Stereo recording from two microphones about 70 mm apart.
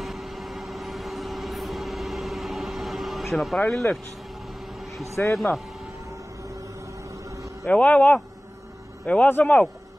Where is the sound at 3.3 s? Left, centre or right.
Centre.